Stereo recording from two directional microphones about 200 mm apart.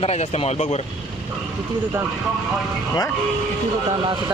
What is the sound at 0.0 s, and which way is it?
Speech, 30° left (ahead or behind).